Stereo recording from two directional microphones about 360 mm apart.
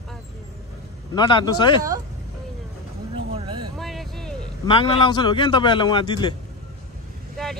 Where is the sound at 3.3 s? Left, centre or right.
Centre.